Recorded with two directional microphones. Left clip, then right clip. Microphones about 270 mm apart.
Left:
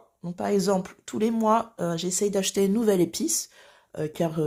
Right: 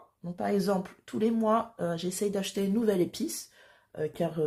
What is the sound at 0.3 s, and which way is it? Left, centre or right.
Speech, left.